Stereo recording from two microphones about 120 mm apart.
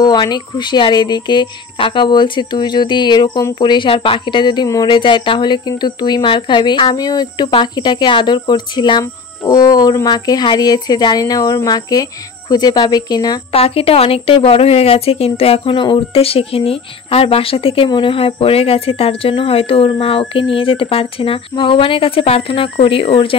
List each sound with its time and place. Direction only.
0.0 s speech: 35° left (ahead or behind)
13.5 s a woman's voice: 55° left (ahead or behind)